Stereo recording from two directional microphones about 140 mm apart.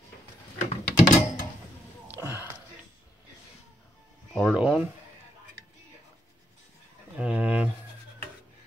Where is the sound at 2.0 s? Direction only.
15° right (ahead or behind).